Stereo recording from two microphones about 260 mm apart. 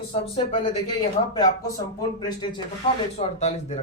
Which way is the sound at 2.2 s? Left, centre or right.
Centre.